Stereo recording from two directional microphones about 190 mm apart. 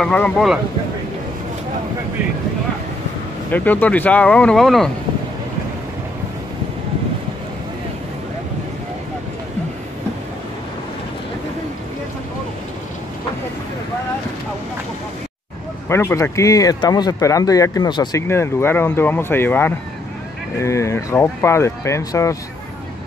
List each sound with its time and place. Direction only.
0.0 s speech: 5° left (ahead or behind)
3.5 s speech: 10° left (ahead or behind)
15.9 s speech: 15° left (ahead or behind)